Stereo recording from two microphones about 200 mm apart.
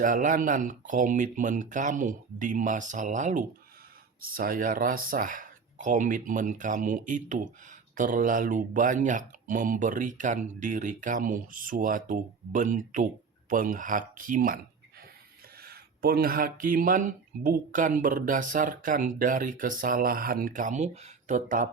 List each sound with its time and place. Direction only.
0.0 s speech: 40° right (ahead or behind)
15.6 s speech: 50° right (ahead or behind)